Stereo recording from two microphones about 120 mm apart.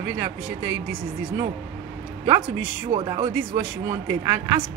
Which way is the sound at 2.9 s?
40° right (ahead or behind).